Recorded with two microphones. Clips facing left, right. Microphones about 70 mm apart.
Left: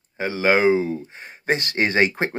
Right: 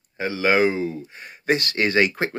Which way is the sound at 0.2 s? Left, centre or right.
Left.